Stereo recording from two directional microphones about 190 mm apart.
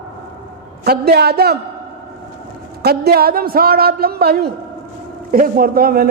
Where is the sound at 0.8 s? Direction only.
55° right (ahead or behind).